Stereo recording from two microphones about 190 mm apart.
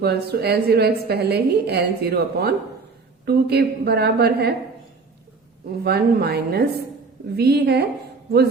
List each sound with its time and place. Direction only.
0.0 s a woman's voice: 55° right (ahead or behind)
5.8 s a woman's voice: 55° right (ahead or behind)